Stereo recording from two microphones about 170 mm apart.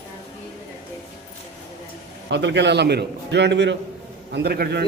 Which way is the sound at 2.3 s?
90° right.